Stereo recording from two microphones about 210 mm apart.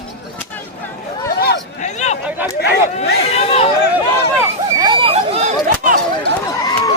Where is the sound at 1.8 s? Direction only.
35° left (ahead or behind).